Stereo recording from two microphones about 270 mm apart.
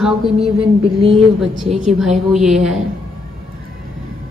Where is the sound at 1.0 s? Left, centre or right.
Right.